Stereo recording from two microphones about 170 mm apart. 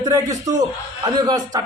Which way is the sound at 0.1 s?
20° right (ahead or behind).